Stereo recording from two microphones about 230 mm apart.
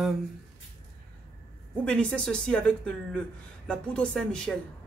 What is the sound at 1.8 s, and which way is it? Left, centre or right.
Speech, centre.